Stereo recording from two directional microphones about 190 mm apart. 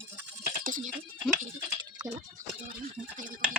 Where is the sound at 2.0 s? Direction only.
20° right (ahead or behind).